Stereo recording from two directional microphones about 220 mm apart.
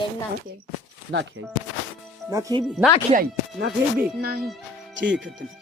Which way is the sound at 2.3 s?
15° right (ahead or behind).